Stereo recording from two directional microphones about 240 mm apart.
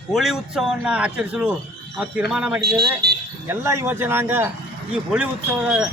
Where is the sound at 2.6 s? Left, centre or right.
Right.